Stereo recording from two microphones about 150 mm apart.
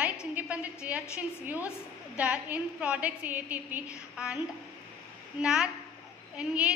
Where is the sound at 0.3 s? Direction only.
10° right (ahead or behind).